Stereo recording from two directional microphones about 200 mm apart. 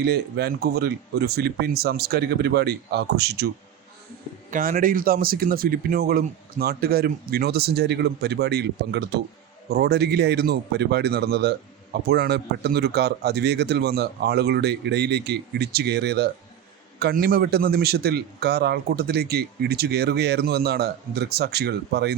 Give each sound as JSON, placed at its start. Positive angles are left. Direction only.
{"t": 0.0, "sound": "a man's voice", "side_deg": -55}
{"t": 4.5, "sound": "a man's voice", "side_deg": -45}